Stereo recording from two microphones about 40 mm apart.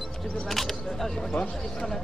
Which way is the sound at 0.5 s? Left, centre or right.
Centre.